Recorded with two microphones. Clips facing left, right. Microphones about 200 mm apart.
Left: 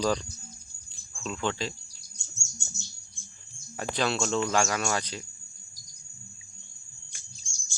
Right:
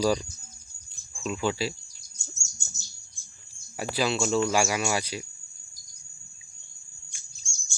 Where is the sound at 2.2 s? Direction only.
40° right (ahead or behind).